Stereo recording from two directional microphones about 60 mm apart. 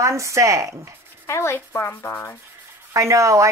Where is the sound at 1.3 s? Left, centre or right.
Left.